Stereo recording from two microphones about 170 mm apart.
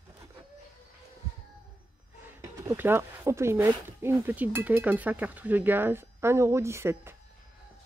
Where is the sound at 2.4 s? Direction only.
15° right (ahead or behind).